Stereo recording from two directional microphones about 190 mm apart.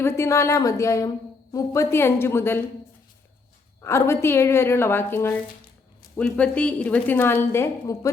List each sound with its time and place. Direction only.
0.0 s a woman's voice: 15° left (ahead or behind)
3.8 s a woman's voice: 15° left (ahead or behind)